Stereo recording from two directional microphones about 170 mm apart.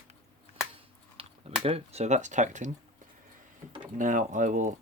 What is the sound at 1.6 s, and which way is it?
Speech, 35° right (ahead or behind).